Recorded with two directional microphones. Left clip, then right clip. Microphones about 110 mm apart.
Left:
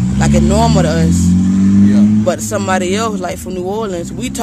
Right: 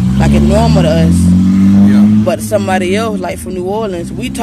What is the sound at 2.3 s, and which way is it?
Speech, 35° left (ahead or behind).